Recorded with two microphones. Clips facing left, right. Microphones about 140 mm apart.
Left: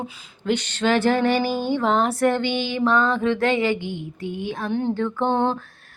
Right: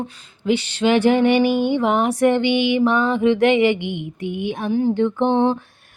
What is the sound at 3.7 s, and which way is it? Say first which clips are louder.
Mantra: right 3 dB; 65° right (ahead or behind).